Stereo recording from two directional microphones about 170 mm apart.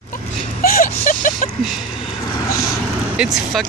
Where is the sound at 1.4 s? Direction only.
45° left (ahead or behind).